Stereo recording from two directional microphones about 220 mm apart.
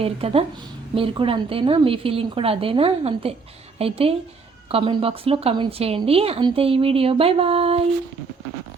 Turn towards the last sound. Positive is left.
turn(degrees=-25)  # may be behind; listen again after turning